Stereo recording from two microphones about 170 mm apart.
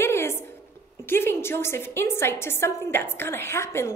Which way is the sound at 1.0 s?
15° left (ahead or behind).